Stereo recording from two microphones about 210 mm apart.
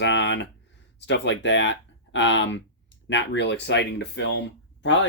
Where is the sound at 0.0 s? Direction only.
60° left (ahead or behind).